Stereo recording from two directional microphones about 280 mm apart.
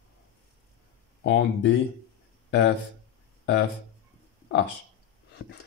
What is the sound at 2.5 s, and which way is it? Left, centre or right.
Speech, left.